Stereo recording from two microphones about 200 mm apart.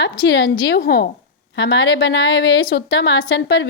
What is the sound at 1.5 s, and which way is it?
Speech, 60° left (ahead or behind).